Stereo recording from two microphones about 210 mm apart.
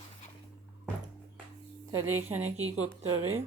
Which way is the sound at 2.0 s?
90° right.